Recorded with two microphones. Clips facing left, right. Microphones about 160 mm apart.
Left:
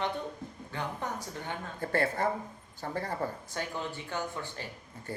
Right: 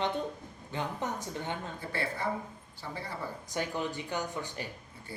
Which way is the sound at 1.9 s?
45° left (ahead or behind).